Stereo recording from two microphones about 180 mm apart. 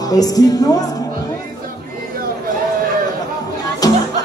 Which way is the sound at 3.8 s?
20° left (ahead or behind).